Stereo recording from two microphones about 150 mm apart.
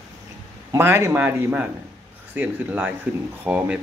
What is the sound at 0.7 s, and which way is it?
Speech, 15° right (ahead or behind).